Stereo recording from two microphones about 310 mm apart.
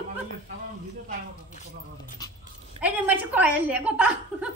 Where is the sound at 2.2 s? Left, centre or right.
Centre.